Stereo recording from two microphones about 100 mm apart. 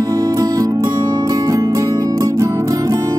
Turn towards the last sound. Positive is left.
turn(degrees=-35)  # may be behind; listen again after turning